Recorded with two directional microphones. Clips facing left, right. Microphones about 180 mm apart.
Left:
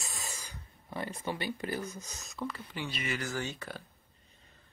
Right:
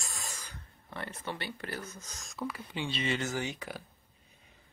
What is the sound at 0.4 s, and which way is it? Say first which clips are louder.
Speech: even; 10° left (ahead or behind).